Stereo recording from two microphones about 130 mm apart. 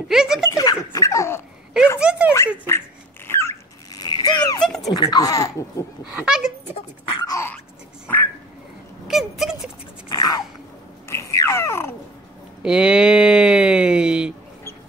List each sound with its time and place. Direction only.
0.1 s speech: 5° right (ahead or behind)
0.5 s dog: 25° left (ahead or behind)
2.0 s speech: 10° right (ahead or behind)
3.3 s a sound: 20° left (ahead or behind)
4.0 s a sound: 30° left (ahead or behind)
4.6 s a sound: 5° left (ahead or behind)
4.8 s speech: 30° left (ahead or behind)
6.1 s speech: 5° right (ahead or behind)
7.2 s dog: 20° left (ahead or behind)
9.0 s speech: centre (ahead or behind)
10.0 s a sound: 30° left (ahead or behind)
12.6 s speech: 5° right (ahead or behind)